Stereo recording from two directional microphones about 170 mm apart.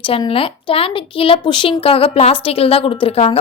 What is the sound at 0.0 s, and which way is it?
A woman's voice, 30° left (ahead or behind).